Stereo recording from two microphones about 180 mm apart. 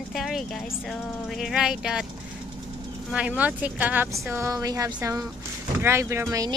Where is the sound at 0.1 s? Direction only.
Centre (ahead or behind).